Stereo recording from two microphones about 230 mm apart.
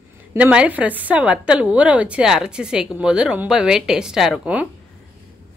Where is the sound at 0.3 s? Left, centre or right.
Centre.